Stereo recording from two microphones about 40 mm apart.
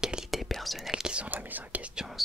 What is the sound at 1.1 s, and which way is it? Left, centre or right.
Speech, right.